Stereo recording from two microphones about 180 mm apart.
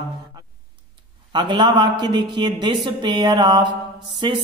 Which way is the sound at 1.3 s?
25° right (ahead or behind).